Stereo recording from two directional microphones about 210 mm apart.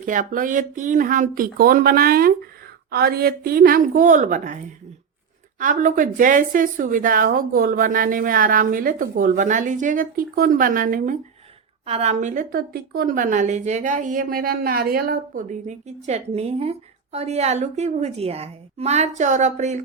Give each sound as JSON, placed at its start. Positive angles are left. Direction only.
{"t": 0.0, "sound": "a woman's voice", "side_deg": -40}